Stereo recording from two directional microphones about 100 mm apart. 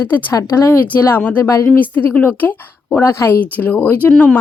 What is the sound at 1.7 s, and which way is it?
A woman's voice, 20° left (ahead or behind).